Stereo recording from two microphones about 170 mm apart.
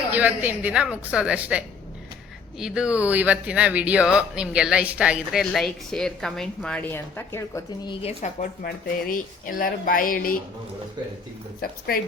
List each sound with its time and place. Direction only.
0.1 s a woman's voice: 10° right (ahead or behind); by 7.6 s 15° left (ahead or behind)
7.9 s speech: 40° left (ahead or behind)
8.6 s speech: 55° left (ahead or behind)
11.6 s speech: 60° left (ahead or behind)